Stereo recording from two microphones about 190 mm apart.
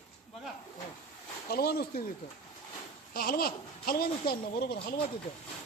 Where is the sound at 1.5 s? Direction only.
55° left (ahead or behind).